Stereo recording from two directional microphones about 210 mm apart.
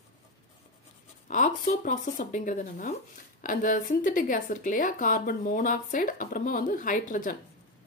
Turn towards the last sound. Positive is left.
turn(degrees=40)  # may be behind; listen again after turning